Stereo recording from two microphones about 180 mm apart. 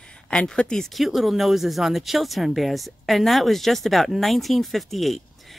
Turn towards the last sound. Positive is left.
turn(degrees=0)  # may be behind; listen again after turning